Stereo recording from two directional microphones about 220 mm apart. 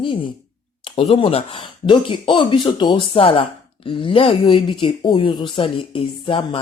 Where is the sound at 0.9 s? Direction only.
25° left (ahead or behind).